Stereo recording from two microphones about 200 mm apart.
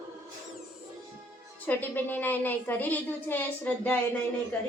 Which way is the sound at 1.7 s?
10° left (ahead or behind).